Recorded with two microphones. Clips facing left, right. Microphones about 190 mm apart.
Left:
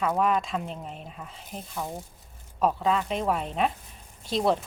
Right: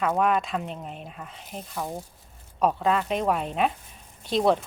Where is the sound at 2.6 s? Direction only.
Centre (ahead or behind).